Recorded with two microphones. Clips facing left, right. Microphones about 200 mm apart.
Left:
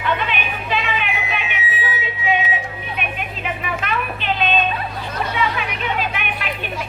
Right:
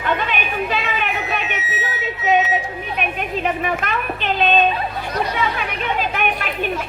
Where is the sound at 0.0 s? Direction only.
45° right (ahead or behind).